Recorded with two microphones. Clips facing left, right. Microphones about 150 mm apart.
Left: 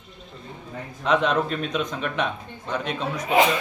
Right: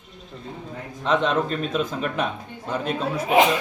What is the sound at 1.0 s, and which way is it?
A man's voice, centre (ahead or behind).